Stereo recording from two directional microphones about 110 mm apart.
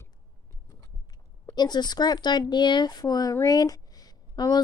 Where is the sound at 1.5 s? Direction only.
40° left (ahead or behind).